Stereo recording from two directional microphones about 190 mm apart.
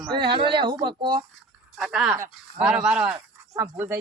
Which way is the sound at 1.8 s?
5° right (ahead or behind).